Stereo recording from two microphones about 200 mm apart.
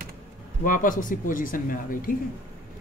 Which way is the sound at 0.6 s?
40° left (ahead or behind).